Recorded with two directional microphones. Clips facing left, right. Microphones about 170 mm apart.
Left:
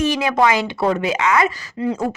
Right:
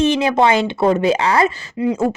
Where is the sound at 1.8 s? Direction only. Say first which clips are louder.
Right 3 dB; 15° right (ahead or behind).